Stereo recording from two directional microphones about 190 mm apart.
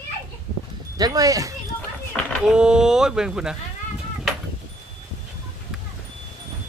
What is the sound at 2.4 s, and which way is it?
Speech, 5° right (ahead or behind).